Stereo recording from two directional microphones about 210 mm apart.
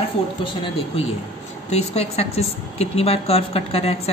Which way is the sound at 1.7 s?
30° left (ahead or behind).